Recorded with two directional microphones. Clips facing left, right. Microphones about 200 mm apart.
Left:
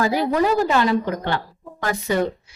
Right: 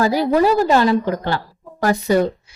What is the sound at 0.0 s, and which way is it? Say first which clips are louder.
A woman's voice: right 4 dB; 35° right (ahead or behind).